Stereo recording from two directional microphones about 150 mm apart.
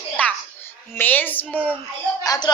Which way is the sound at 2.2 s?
25° left (ahead or behind).